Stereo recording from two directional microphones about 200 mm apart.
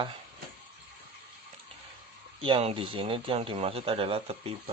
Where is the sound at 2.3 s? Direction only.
25° right (ahead or behind).